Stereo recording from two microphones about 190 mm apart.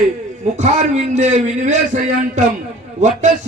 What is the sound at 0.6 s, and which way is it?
A man's voice, 35° right (ahead or behind).